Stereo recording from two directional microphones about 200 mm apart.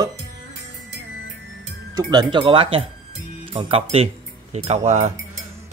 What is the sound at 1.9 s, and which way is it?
Speech, 20° right (ahead or behind).